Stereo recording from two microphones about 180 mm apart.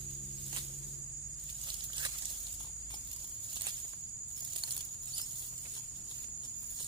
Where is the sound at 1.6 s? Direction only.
25° right (ahead or behind).